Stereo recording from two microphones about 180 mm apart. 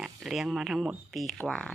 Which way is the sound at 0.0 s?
Centre (ahead or behind).